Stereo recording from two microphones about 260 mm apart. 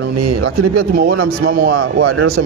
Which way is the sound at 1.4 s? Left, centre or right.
Right.